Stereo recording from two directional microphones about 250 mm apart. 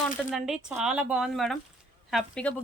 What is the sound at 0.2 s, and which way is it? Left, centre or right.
Speech, centre.